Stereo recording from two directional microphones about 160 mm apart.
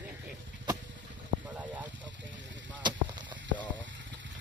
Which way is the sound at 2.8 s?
30° right (ahead or behind).